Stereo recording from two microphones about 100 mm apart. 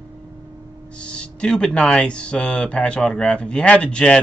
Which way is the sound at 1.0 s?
10° left (ahead or behind).